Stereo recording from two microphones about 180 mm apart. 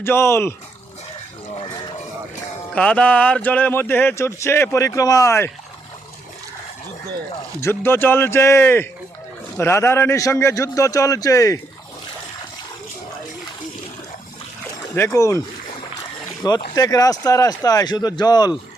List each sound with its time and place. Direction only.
0.0 s speech: 15° left (ahead or behind)
2.7 s speech: 5° left (ahead or behind)
7.6 s speech: 10° left (ahead or behind)
14.9 s speech: 15° left (ahead or behind)
16.4 s speech: 20° left (ahead or behind)